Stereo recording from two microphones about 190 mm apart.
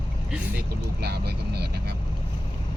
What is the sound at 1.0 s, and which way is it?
Vehicle, 60° right (ahead or behind).